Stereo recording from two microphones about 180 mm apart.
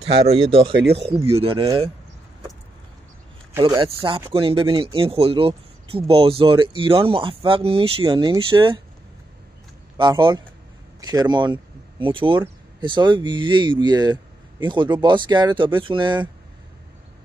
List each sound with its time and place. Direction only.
0.0 s speech: 35° right (ahead or behind)
0.7 s speech: 70° right (ahead or behind)
1.2 s speech: 30° right (ahead or behind)
3.6 s speech: 25° right (ahead or behind)
9.9 s speech: 25° right (ahead or behind)